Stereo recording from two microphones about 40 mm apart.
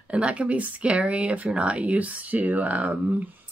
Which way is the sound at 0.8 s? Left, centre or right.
Right.